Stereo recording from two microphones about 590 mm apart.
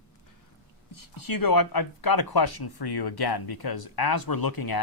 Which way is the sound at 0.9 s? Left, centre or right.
Left.